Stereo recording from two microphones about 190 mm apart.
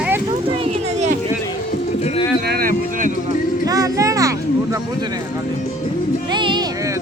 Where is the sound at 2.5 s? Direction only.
50° right (ahead or behind).